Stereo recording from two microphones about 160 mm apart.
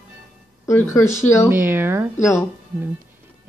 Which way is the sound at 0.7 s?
15° left (ahead or behind).